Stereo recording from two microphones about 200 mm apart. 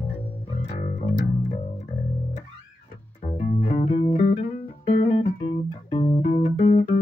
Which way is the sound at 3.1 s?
35° left (ahead or behind).